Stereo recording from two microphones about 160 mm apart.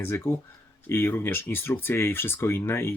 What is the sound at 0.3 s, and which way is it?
Speech, 15° left (ahead or behind).